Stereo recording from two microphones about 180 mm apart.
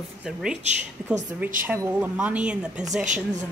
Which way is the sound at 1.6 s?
10° right (ahead or behind).